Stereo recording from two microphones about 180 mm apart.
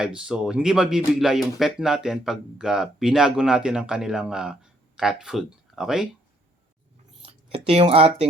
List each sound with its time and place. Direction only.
0.0 s speech: 5° right (ahead or behind)
7.7 s speech: 30° right (ahead or behind)